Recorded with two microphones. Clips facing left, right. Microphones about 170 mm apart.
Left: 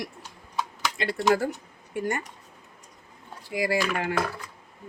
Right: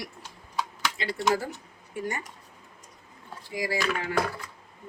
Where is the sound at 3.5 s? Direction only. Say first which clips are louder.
Left 3 dB; 60° left (ahead or behind).